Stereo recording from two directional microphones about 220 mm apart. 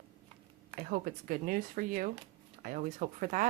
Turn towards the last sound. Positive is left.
turn(degrees=-35)  # may be behind; listen again after turning